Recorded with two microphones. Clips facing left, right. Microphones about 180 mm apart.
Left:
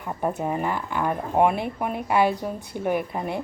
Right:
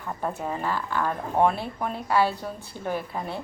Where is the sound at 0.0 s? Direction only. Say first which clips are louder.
Left 4 dB; 15° left (ahead or behind).